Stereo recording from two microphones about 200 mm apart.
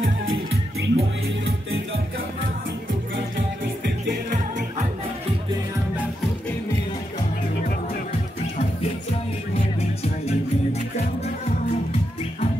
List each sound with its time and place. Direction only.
0.0 s music: 80° right
3.8 s music: 40° right (ahead or behind)
9.8 s music: 30° left (ahead or behind)